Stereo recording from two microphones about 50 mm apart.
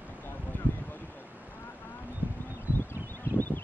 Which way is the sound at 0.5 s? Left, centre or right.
Left.